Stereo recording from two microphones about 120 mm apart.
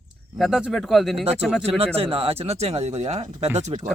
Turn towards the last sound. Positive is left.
turn(degrees=-70)  # may be behind; listen again after turning